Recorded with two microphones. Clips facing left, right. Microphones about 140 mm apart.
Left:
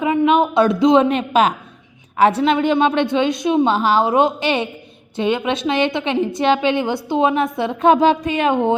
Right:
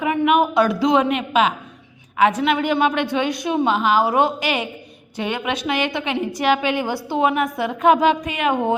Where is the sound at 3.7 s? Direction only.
30° left (ahead or behind).